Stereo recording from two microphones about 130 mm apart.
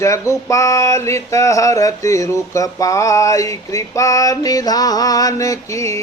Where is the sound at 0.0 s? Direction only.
25° left (ahead or behind).